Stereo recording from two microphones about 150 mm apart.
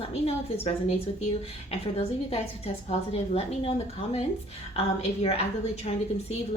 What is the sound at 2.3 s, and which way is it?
A woman's voice, 45° left (ahead or behind).